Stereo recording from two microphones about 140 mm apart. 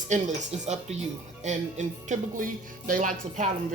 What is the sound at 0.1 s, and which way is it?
Speech, 60° right (ahead or behind).